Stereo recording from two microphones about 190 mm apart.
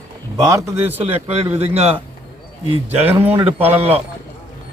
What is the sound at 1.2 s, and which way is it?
Speech, 30° right (ahead or behind).